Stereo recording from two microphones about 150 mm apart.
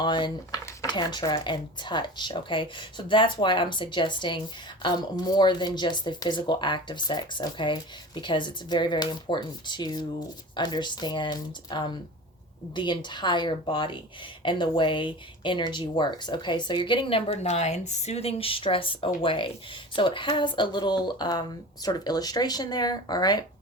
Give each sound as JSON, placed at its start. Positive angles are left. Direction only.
{"t": 0.0, "sound": "speech", "side_deg": 30}